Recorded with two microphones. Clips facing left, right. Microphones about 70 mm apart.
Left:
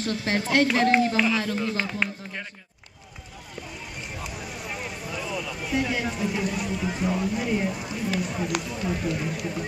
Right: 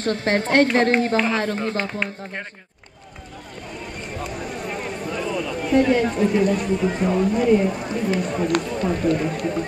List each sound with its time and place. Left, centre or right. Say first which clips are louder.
0.0 s a woman's voice: right 5 dB; right
4.3 s a sound: right 6 dB; right
6.0 s speech: right 9 dB; right
7.3 s speech: right 9 dB; centre
7.7 s speech: right 6 dB; right